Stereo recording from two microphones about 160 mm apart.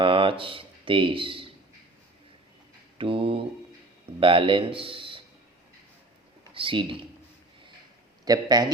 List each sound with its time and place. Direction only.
0.0 s speech: 35° right (ahead or behind)
3.0 s mantra: 35° right (ahead or behind)
4.2 s a man's voice: 30° right (ahead or behind)
6.5 s speech: 35° right (ahead or behind)
8.2 s a man's voice: 25° right (ahead or behind)